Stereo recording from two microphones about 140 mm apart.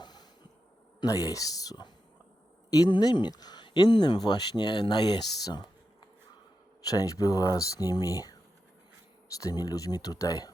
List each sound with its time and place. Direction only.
0.0 s a sound: 30° left (ahead or behind)
1.0 s speech: 25° left (ahead or behind)
6.8 s speech: 25° left (ahead or behind)